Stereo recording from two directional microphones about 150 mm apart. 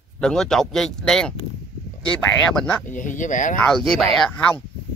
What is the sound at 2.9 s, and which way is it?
Speech, 60° left (ahead or behind).